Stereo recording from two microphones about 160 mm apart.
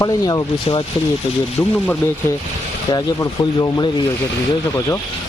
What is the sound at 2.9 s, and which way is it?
Speech, 20° left (ahead or behind).